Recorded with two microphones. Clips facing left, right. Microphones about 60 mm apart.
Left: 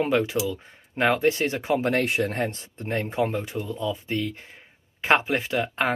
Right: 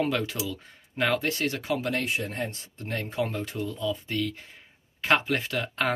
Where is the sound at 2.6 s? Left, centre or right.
Left.